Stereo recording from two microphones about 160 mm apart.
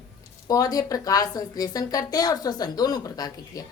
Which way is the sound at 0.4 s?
25° left (ahead or behind).